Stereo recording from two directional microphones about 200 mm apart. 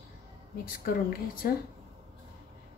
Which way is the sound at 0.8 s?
50° left (ahead or behind).